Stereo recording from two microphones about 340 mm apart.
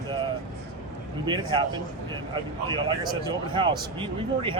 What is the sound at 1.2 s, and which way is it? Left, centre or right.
Speech, centre.